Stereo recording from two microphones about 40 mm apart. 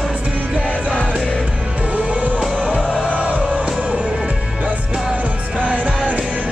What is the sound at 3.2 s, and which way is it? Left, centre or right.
Music, right.